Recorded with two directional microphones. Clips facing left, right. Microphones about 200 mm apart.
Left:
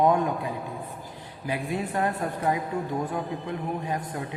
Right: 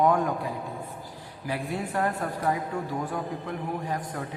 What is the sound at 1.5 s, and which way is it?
A man's voice, 20° left (ahead or behind).